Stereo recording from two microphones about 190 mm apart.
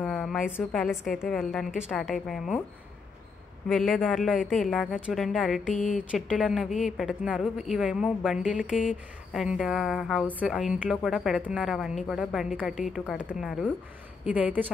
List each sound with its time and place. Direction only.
0.0 s a woman's voice: 5° left (ahead or behind)
3.6 s a woman's voice: centre (ahead or behind)
5.8 s speech: 40° left (ahead or behind)
6.1 s a woman's voice: centre (ahead or behind)